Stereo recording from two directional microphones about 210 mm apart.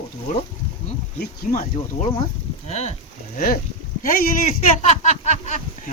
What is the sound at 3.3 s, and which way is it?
Speech, 40° left (ahead or behind).